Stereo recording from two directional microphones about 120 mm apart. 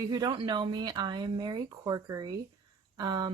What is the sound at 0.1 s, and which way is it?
Speech, 40° right (ahead or behind).